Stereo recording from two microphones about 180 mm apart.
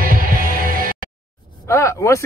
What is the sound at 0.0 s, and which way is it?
Music, 50° right (ahead or behind).